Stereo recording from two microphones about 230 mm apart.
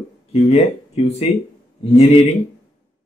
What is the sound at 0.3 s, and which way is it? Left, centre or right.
Speech, left.